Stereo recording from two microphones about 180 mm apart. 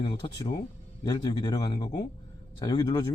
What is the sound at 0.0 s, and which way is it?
Speech, 30° left (ahead or behind).